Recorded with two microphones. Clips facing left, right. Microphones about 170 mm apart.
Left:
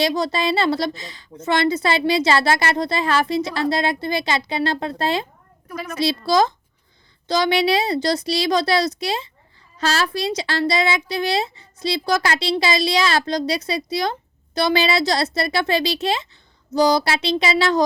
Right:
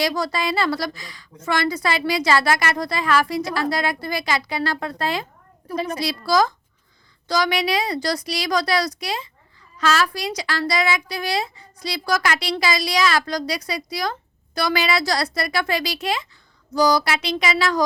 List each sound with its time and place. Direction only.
0.0 s speech: 25° left (ahead or behind)
5.6 s a woman's voice: 30° right (ahead or behind)
6.0 s speech: 25° left (ahead or behind)